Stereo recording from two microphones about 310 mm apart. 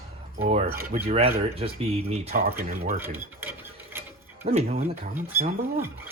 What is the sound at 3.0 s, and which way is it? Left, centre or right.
Cutlery, centre.